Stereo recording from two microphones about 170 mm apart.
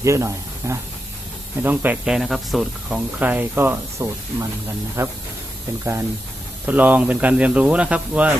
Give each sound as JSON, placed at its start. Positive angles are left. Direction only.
{"t": 0.0, "sound": "speech", "side_deg": -15}
{"t": 6.7, "sound": "speech", "side_deg": -10}